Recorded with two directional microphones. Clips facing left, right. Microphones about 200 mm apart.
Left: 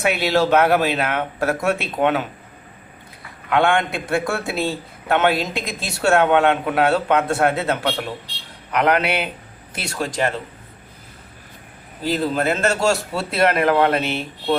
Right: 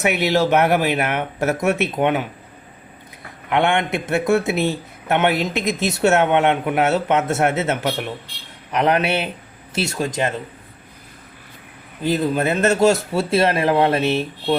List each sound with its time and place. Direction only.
0.0 s a man's voice: 20° right (ahead or behind)
3.5 s a man's voice: 20° right (ahead or behind)
12.0 s a man's voice: 20° right (ahead or behind)